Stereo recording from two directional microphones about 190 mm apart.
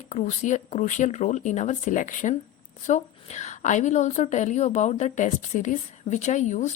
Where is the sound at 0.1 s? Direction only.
40° left (ahead or behind).